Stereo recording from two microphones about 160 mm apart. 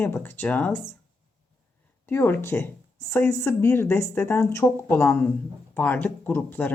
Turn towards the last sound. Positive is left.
turn(degrees=10)  # may be behind; listen again after turning